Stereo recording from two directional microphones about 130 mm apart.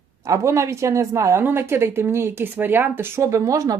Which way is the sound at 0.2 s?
25° right (ahead or behind).